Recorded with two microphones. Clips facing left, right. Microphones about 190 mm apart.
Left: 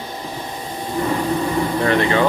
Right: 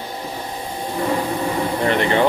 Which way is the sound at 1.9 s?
20° right (ahead or behind).